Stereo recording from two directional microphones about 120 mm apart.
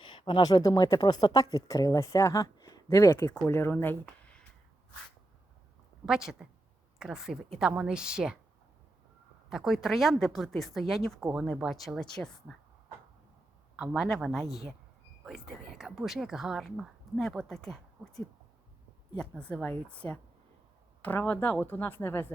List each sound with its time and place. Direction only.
0.0 s a sound: 45° left (ahead or behind)
0.6 s speech: 30° left (ahead or behind)
6.1 s a woman's voice: 5° right (ahead or behind)
9.5 s speech: 5° right (ahead or behind)
13.7 s speech: 5° right (ahead or behind)
19.1 s speech: 10° left (ahead or behind)